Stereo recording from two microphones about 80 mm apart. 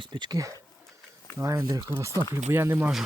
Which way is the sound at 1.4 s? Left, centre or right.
Right.